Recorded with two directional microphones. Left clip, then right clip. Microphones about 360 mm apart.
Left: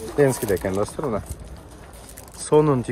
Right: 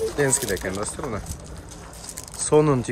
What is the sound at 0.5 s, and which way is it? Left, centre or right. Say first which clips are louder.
Speech: left 4 dB; centre.